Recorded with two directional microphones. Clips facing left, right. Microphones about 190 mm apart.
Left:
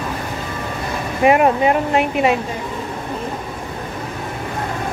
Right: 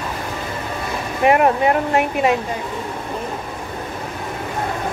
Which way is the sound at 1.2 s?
20° left (ahead or behind).